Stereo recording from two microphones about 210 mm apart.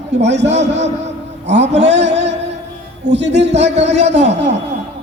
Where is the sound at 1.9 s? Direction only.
55° right (ahead or behind).